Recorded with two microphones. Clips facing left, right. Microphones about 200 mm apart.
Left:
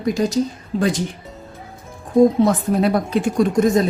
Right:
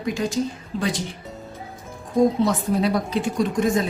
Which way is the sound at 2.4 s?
50° left (ahead or behind).